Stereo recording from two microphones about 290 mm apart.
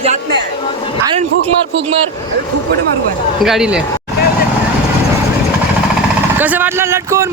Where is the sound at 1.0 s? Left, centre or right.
Centre.